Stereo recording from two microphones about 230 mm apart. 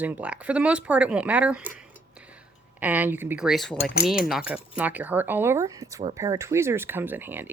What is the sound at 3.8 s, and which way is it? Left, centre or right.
Cutlery, left.